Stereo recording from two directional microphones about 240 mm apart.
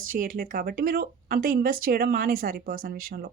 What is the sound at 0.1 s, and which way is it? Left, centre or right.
Speech, right.